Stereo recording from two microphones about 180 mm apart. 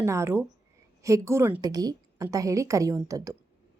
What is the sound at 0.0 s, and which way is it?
A woman's voice, 15° right (ahead or behind).